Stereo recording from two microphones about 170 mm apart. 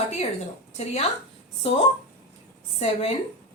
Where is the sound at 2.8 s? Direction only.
35° left (ahead or behind).